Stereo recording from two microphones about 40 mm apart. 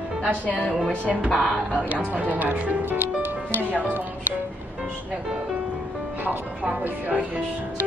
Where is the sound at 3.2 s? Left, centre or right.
Right.